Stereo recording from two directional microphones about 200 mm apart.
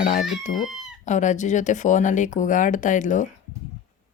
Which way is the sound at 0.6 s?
Centre (ahead or behind).